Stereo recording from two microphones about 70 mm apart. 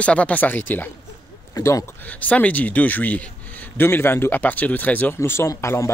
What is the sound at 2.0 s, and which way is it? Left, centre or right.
A man's voice, left.